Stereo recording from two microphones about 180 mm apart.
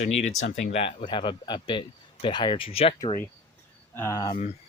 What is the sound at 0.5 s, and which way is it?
Speech, 35° left (ahead or behind).